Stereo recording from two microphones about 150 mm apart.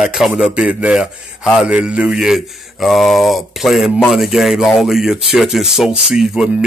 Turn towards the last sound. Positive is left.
turn(degrees=-5)  # may be behind; listen again after turning